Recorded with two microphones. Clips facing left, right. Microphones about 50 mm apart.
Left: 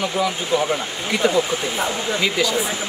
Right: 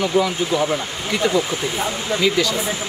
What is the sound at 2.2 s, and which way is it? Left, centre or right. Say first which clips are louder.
Speech: right 3 dB; centre.